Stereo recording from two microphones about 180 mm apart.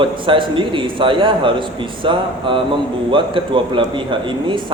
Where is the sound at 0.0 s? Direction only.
30° right (ahead or behind).